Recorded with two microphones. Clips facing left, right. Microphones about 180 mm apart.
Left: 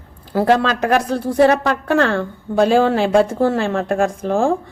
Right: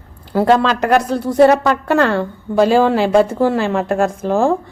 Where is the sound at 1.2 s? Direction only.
55° right (ahead or behind).